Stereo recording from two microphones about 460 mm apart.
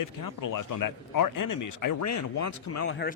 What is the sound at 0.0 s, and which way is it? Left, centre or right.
A man's voice, left.